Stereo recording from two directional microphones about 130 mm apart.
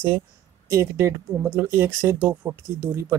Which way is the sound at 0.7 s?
20° right (ahead or behind).